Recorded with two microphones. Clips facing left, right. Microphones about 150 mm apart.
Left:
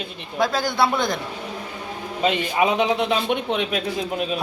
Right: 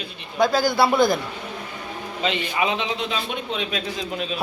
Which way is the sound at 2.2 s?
45° left (ahead or behind).